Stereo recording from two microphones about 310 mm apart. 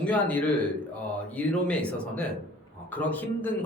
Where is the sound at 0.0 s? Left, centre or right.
Centre.